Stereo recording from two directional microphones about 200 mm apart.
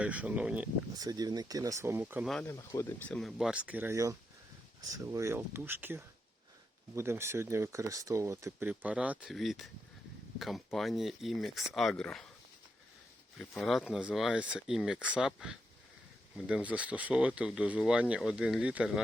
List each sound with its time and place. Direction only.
0.0 s speech: 5° right (ahead or behind)
0.9 s speech: 20° right (ahead or behind)
2.3 s speech: 15° left (ahead or behind)
3.1 s speech: centre (ahead or behind)
13.4 s speech: 5° left (ahead or behind)